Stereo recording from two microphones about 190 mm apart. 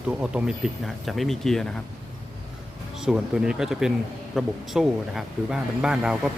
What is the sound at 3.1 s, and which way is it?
Speech, 5° right (ahead or behind).